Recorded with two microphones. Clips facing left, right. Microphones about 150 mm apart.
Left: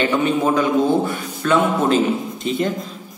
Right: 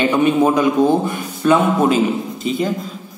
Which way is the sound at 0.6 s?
15° right (ahead or behind).